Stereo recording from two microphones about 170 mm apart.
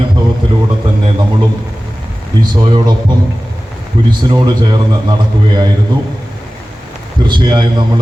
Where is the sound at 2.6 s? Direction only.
25° right (ahead or behind).